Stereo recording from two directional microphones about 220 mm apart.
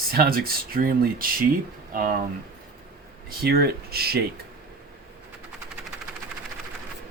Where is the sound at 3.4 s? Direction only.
45° right (ahead or behind).